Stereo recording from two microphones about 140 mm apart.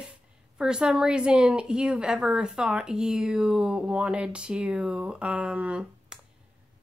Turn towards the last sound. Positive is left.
turn(degrees=-5)  # may be behind; listen again after turning